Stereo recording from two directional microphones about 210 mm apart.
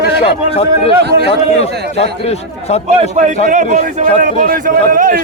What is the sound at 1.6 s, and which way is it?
A man's voice, 30° left (ahead or behind).